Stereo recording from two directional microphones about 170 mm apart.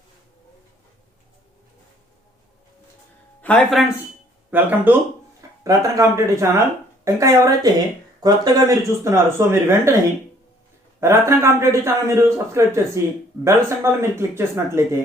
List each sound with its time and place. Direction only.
3.4 s speech: 5° left (ahead or behind)
4.5 s a man's voice: 10° right (ahead or behind)
11.0 s a man's voice: 15° right (ahead or behind)